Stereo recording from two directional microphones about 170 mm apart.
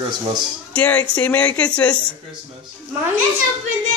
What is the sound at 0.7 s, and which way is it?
Speech, 10° left (ahead or behind).